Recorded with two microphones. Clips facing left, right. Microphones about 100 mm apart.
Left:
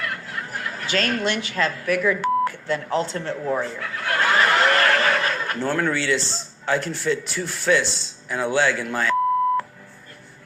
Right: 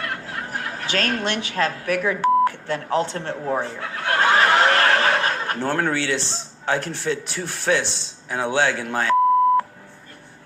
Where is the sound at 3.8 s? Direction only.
30° right (ahead or behind).